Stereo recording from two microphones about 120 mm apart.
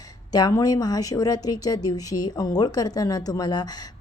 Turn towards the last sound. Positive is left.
turn(degrees=35)  # may be behind; listen again after turning